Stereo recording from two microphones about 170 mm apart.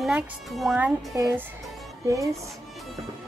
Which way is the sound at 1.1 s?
20° right (ahead or behind).